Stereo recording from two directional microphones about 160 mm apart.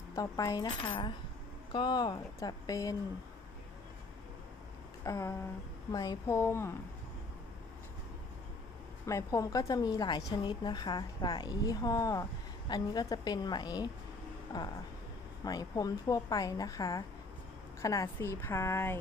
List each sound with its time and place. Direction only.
0.2 s a woman's voice: 20° left (ahead or behind)
5.0 s a woman's voice: 20° left (ahead or behind)
9.0 s a woman's voice: 20° left (ahead or behind)